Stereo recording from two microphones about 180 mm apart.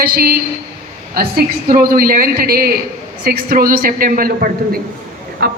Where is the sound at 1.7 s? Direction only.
55° right (ahead or behind).